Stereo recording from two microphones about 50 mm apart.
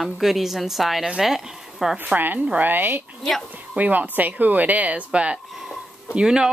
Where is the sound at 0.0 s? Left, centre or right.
Centre.